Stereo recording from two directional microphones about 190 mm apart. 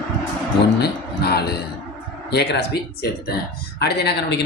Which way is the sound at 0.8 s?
60° left (ahead or behind).